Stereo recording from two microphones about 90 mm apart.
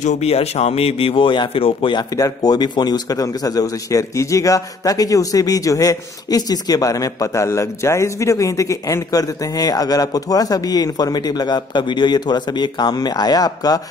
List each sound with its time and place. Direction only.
0.7 s a man's voice: 90° left
2.1 s a man's voice: 45° left (ahead or behind)